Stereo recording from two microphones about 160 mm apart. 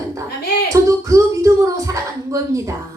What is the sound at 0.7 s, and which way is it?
A woman's voice, 20° right (ahead or behind).